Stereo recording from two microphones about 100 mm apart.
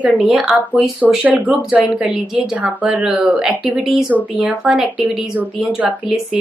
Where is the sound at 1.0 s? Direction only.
15° right (ahead or behind).